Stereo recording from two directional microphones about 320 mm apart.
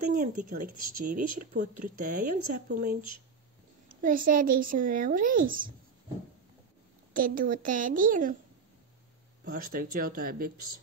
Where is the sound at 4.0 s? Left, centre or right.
Right.